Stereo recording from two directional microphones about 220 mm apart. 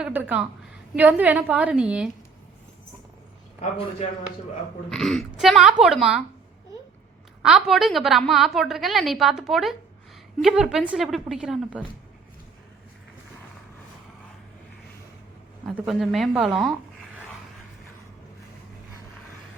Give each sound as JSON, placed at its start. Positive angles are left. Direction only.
{"t": 0.0, "sound": "a woman's voice", "side_deg": -5}
{"t": 3.6, "sound": "a man's voice", "side_deg": 30}
{"t": 4.9, "sound": "a woman's voice", "side_deg": 0}
{"t": 7.4, "sound": "a woman's voice", "side_deg": 0}
{"t": 15.6, "sound": "a woman's voice", "side_deg": 0}